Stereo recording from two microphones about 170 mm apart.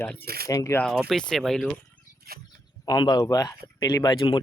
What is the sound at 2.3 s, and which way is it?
Speech, 65° right (ahead or behind).